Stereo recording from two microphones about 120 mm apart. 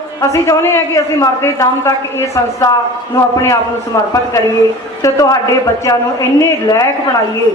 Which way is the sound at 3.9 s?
25° left (ahead or behind).